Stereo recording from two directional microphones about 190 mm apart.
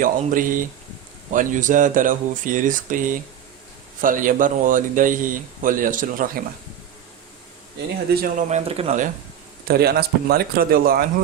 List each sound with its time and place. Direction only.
0.0 s speech: 45° right (ahead or behind)
8.1 s speech: 45° right (ahead or behind)
9.6 s speech: 55° right (ahead or behind)